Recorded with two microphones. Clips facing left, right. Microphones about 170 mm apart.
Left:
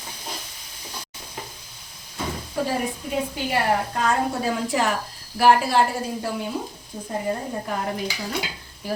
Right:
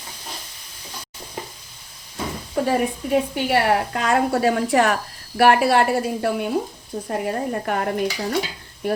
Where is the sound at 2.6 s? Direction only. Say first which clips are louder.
Right 4 dB; 60° right (ahead or behind).